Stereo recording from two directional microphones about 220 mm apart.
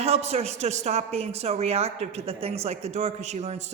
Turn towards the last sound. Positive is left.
turn(degrees=-30)  # may be behind; listen again after turning